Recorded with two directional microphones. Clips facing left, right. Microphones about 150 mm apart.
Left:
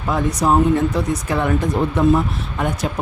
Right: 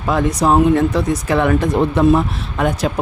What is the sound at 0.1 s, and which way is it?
Speech, 90° right.